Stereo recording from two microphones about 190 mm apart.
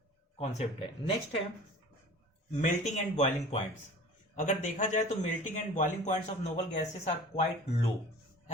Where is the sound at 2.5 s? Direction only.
40° left (ahead or behind).